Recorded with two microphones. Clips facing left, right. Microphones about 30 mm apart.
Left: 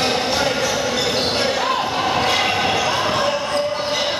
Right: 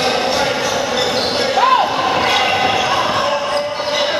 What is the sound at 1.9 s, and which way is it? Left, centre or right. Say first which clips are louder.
Basketball bounce: right 3 dB; centre.